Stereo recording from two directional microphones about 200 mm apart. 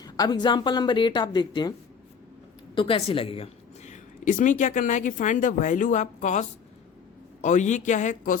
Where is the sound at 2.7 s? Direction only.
25° left (ahead or behind).